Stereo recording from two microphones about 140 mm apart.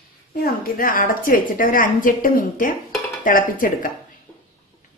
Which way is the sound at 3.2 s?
75° left (ahead or behind).